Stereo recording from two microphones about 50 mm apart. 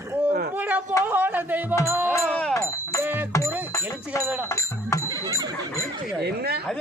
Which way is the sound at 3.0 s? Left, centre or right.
Right.